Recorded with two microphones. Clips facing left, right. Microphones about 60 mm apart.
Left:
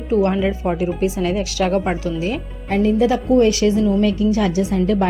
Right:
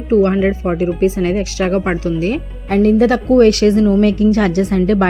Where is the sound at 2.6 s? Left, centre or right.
Right.